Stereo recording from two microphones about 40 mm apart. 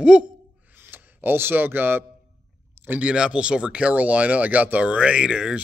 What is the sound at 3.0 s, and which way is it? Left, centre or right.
Speech, right.